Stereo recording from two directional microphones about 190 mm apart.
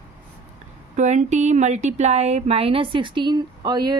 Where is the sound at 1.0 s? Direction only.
40° right (ahead or behind).